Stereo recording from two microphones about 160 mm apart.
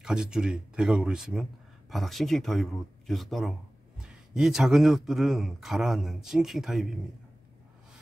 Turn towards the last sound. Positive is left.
turn(degrees=0)  # may be behind; listen again after turning